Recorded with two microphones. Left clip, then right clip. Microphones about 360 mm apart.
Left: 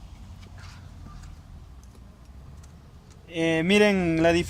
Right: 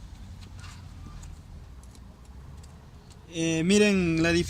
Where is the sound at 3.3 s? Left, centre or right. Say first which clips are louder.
Left 3 dB; left.